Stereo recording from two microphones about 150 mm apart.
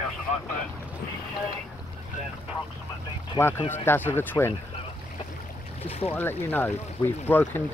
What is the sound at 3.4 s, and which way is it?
Speech, 15° left (ahead or behind).